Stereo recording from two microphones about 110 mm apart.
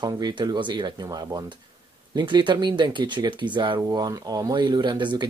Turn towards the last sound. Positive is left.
turn(degrees=-45)  # may be behind; listen again after turning